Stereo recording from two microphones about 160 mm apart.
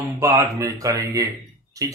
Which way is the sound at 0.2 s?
20° right (ahead or behind).